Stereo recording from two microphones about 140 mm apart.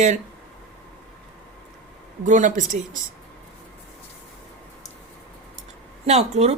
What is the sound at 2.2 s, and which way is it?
Speech, 65° right (ahead or behind).